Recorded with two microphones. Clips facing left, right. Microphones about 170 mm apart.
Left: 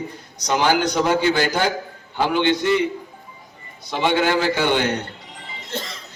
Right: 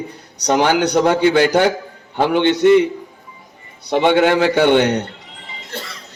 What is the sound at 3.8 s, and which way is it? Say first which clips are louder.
A man's voice: right 6 dB; 60° right (ahead or behind).